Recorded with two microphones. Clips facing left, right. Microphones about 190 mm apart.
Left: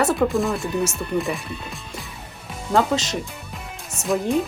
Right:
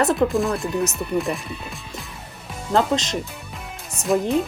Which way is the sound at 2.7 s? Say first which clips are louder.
Even; 5° left (ahead or behind).